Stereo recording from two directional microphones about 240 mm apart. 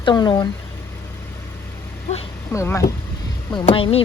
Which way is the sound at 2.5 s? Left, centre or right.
Centre.